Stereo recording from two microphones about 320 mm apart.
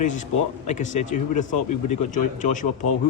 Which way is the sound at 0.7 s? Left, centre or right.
Left.